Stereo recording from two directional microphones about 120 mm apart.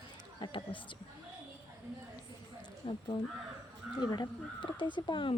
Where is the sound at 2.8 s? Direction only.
45° left (ahead or behind).